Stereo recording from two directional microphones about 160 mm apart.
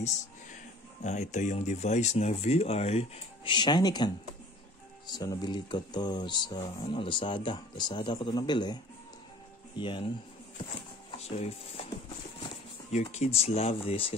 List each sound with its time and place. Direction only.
1.0 s speech: 45° left (ahead or behind); by 8.7 s 25° left (ahead or behind)
9.8 s speech: 30° left (ahead or behind)
11.1 s music: 40° left (ahead or behind)
12.9 s speech: 45° left (ahead or behind)